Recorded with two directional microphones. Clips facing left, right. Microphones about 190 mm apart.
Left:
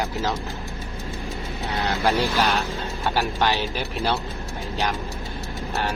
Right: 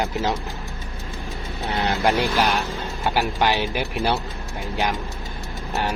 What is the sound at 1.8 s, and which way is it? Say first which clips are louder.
Speech: right 1 dB; 15° right (ahead or behind).